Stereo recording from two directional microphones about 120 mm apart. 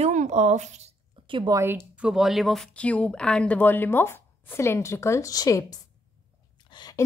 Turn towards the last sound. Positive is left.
turn(degrees=35)  # may be behind; listen again after turning